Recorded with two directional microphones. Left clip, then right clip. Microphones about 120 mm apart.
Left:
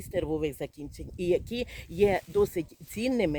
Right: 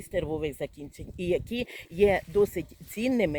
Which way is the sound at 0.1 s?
35° left (ahead or behind).